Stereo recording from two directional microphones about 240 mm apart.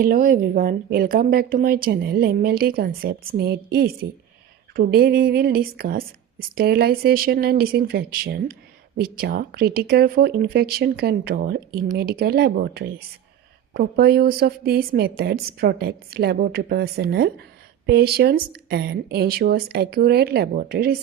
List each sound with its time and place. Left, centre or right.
0.0 s speech: right